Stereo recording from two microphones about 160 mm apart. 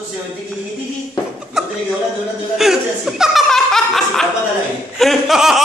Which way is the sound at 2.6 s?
5° right (ahead or behind).